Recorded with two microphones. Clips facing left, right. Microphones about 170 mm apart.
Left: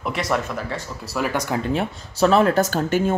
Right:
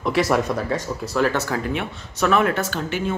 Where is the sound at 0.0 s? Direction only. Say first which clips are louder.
Right 4 dB; 5° right (ahead or behind).